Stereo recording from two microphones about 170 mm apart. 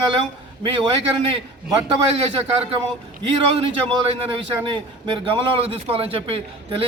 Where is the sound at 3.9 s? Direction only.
35° right (ahead or behind).